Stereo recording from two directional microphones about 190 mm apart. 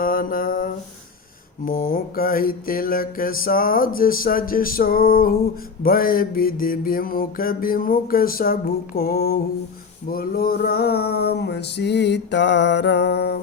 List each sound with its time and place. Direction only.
0.0 s mantra: 50° left (ahead or behind)
10.1 s male singing: 50° left (ahead or behind)